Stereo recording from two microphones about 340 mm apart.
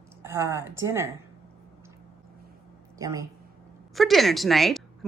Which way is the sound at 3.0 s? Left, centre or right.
Centre.